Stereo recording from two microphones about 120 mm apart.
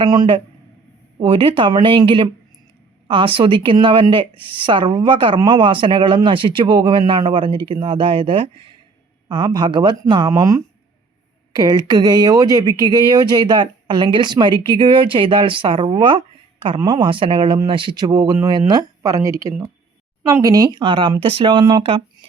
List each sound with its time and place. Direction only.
0.0 s speech: 35° right (ahead or behind)